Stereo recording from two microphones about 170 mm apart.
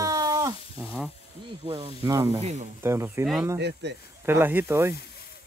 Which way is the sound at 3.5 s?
85° right.